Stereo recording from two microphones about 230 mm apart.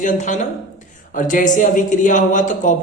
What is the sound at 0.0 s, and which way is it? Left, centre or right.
Speech, left.